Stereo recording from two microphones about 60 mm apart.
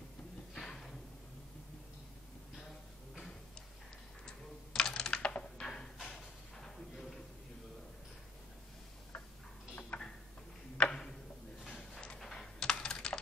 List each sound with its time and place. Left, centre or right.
0.6 s a sound: centre
3.2 s tick-tock: centre
4.3 s computer keyboard: centre
9.9 s tick-tock: left
10.8 s tick-tock: centre
11.7 s computer keyboard: centre